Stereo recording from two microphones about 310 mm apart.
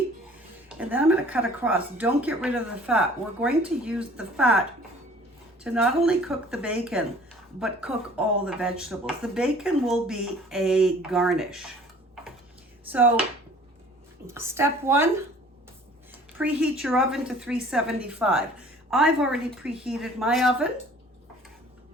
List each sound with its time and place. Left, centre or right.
0.7 s speech: centre
5.6 s speech: centre
12.9 s speech: centre
14.3 s speech: centre
16.4 s speech: centre